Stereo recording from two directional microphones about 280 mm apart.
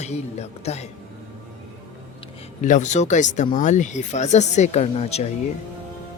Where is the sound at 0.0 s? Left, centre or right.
Left.